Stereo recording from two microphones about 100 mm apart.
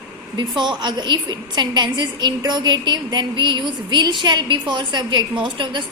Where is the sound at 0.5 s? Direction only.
50° right (ahead or behind).